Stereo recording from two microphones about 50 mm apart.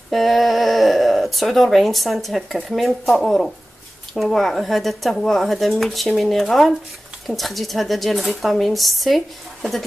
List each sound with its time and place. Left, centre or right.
0.1 s speech: centre